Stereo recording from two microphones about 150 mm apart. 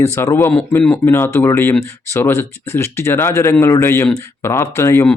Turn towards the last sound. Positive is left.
turn(degrees=15)  # may be behind; listen again after turning